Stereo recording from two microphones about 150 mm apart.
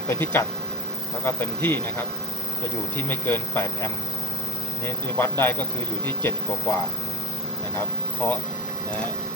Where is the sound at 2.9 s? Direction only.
15° left (ahead or behind).